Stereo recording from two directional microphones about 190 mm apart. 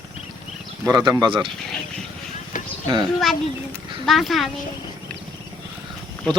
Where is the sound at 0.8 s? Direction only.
20° right (ahead or behind).